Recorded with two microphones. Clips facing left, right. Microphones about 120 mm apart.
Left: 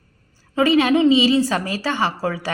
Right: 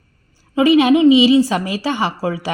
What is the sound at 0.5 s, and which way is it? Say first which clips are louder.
A woman's voice: right 4 dB; 15° right (ahead or behind).